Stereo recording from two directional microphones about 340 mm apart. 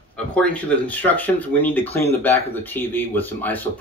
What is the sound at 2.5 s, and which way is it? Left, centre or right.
Speech, centre.